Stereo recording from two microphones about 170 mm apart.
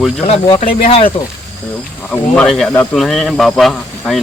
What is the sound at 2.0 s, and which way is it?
Speech, 5° left (ahead or behind).